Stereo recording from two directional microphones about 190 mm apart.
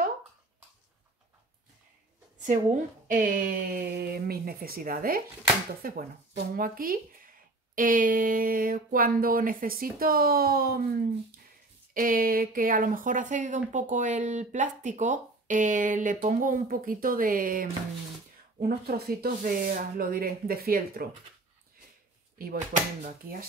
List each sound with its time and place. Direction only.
2.4 s speech: 40° right (ahead or behind)
22.4 s speech: 50° right (ahead or behind)